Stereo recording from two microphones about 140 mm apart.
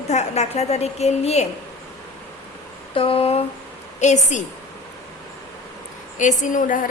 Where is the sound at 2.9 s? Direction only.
40° left (ahead or behind).